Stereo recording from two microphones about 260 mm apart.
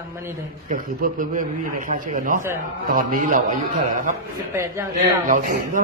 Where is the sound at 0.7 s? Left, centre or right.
Right.